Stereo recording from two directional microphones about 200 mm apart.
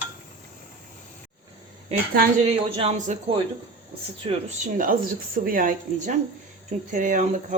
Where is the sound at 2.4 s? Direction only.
35° right (ahead or behind).